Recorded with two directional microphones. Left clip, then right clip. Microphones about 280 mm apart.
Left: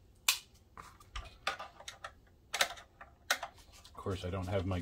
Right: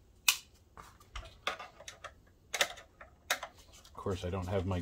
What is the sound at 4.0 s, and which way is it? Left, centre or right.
Speech, right.